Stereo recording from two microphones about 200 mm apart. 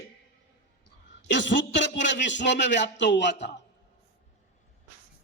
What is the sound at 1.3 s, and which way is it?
A man's voice, 65° left (ahead or behind).